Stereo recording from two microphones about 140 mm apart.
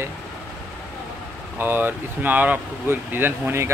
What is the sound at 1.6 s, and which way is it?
Speech, 15° right (ahead or behind).